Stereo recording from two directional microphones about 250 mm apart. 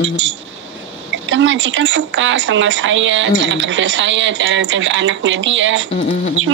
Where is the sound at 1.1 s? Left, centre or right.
Right.